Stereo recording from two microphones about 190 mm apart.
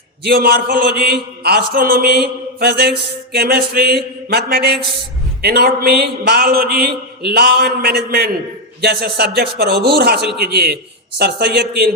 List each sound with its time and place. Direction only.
0.3 s a man's voice: 55° right (ahead or behind)